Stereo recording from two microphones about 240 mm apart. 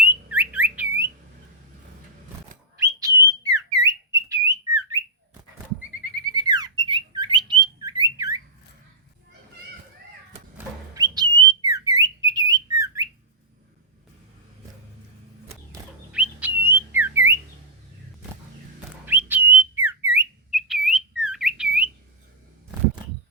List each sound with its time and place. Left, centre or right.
0.0 s bird: centre
2.8 s whistle: centre
6.3 s squawk: centre
10.9 s whistle: centre
15.7 s squawk: centre
19.0 s whistle: centre